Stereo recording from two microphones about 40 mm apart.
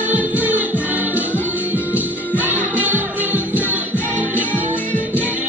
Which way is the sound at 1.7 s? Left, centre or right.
Right.